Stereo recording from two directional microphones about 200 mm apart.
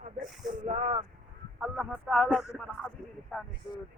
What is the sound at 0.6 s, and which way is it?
Speech, 35° right (ahead or behind).